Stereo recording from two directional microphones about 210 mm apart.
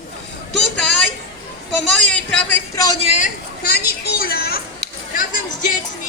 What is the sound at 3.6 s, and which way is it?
Speech, 45° left (ahead or behind).